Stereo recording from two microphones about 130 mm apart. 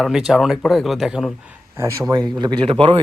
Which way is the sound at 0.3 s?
Centre (ahead or behind).